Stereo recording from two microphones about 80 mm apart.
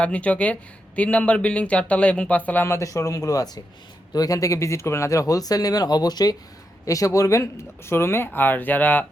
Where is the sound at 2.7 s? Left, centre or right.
Left.